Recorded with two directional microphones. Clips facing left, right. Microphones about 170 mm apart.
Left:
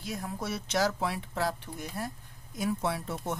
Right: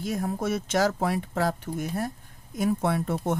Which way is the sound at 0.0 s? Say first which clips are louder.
Right 8 dB; 50° right (ahead or behind).